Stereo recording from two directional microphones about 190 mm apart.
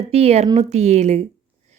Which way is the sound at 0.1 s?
35° right (ahead or behind).